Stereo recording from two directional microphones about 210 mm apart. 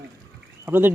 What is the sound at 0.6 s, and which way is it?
Speech, 10° right (ahead or behind).